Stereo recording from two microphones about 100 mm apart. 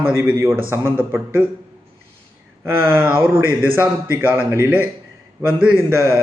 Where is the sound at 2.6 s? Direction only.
25° right (ahead or behind).